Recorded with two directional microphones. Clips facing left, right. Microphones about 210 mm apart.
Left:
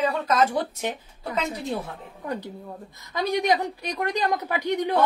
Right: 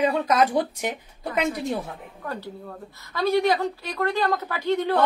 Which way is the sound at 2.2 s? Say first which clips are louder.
Left 2 dB; 15° left (ahead or behind).